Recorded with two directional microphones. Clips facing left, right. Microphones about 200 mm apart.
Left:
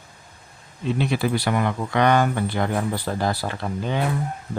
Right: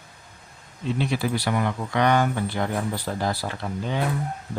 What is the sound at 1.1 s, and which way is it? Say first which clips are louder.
Speech: left 3 dB; 60° left (ahead or behind).